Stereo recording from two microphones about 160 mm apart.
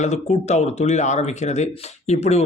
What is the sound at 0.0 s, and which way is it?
Speech, 45° left (ahead or behind).